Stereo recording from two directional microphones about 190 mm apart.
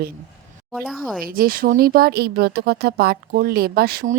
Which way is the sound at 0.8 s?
Centre (ahead or behind).